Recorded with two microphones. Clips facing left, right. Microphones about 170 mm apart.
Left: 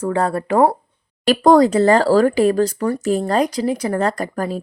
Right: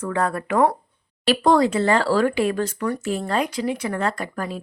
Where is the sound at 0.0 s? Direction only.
30° left (ahead or behind).